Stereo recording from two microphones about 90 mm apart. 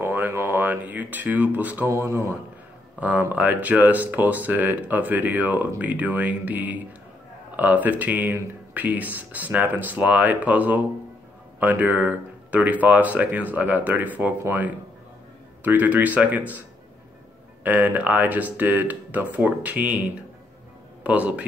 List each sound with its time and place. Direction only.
0.0 s a sound: 25° right (ahead or behind)
1.9 s speech: 35° right (ahead or behind)
3.0 s speech: 15° right (ahead or behind)
17.6 s speech: 15° right (ahead or behind)